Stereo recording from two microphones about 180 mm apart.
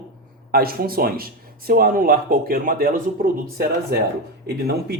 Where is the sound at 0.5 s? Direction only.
55° right (ahead or behind).